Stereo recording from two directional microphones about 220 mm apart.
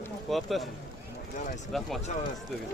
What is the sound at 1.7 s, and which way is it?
Speech, centre (ahead or behind).